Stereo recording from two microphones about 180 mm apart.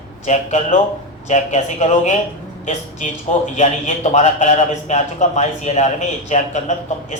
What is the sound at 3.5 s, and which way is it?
A man's voice, 40° left (ahead or behind).